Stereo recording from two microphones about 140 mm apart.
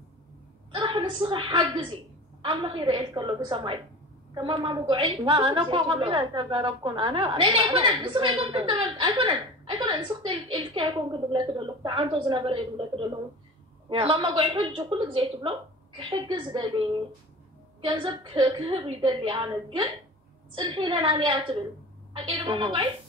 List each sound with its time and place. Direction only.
0.8 s a woman's voice: 35° right (ahead or behind)